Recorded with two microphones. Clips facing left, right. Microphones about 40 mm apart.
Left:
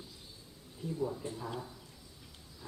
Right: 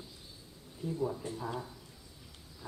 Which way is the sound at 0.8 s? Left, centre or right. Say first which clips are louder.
Right 1 dB; centre.